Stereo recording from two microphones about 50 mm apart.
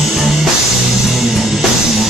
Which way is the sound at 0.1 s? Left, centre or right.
Centre.